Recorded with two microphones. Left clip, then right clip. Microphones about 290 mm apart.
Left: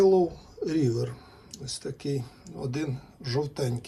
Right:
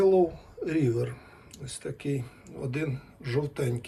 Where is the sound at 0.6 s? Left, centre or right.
Centre.